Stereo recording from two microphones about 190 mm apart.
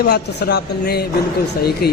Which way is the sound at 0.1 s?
60° left (ahead or behind).